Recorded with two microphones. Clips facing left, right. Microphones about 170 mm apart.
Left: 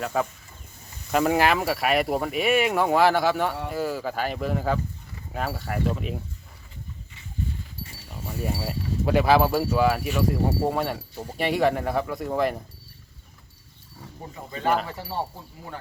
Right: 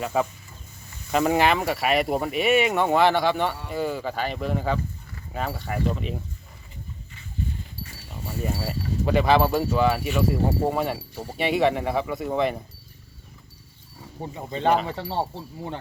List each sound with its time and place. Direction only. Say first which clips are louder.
0.0 s speech: right 2 dB; 5° right (ahead or behind)
8.1 s speech: even; 5° left (ahead or behind)
14.2 s speech: right 5 dB; 25° right (ahead or behind)